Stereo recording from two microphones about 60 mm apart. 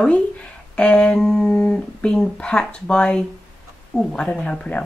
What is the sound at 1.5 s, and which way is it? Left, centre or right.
A woman's voice, left.